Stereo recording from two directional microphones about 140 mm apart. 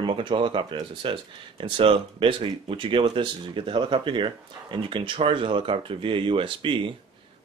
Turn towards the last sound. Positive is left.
turn(degrees=-40)  # may be behind; listen again after turning